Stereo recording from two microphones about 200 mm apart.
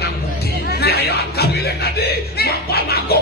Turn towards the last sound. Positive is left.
turn(degrees=50)  # may be behind; listen again after turning